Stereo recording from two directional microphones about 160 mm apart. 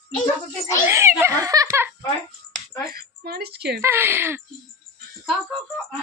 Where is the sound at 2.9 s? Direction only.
75° right (ahead or behind).